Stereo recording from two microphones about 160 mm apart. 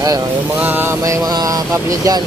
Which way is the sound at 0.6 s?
10° right (ahead or behind).